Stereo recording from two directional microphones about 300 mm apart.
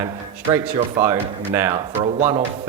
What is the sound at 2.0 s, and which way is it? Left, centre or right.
Speech, right.